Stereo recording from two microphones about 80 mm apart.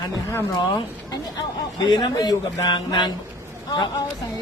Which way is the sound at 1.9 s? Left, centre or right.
Left.